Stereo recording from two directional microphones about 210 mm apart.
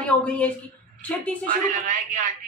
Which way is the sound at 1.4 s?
40° right (ahead or behind).